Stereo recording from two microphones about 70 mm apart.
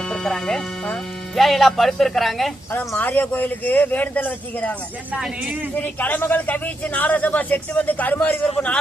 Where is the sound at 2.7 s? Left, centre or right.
Left.